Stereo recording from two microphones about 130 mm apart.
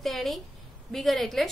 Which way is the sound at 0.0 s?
Centre (ahead or behind).